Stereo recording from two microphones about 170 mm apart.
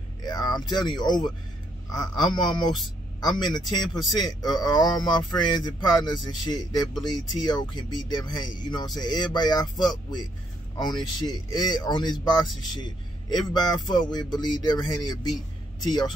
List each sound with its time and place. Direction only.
0.2 s speech: 25° left (ahead or behind)